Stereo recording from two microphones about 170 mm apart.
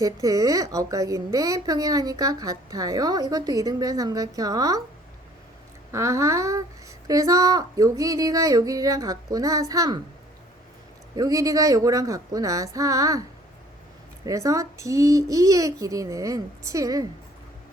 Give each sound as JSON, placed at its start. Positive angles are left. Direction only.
{"t": 0.0, "sound": "a woman's voice", "side_deg": -20}
{"t": 5.9, "sound": "a woman's voice", "side_deg": -15}
{"t": 11.1, "sound": "a woman's voice", "side_deg": -20}
{"t": 14.3, "sound": "a woman's voice", "side_deg": -20}